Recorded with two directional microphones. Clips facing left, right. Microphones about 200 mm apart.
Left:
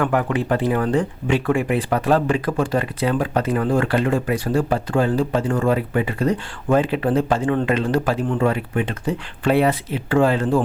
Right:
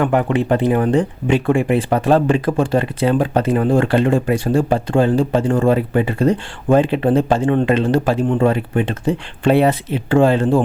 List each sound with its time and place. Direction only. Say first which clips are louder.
0.0 s speech: right 4 dB; 25° right (ahead or behind)